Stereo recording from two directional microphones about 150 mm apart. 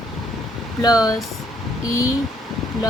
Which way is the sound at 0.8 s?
25° left (ahead or behind).